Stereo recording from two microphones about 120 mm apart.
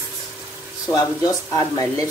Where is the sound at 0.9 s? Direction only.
30° left (ahead or behind).